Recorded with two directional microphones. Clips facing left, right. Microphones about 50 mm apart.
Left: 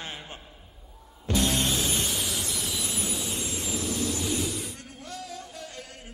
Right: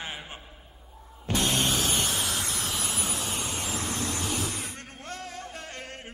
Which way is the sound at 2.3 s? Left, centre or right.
Right.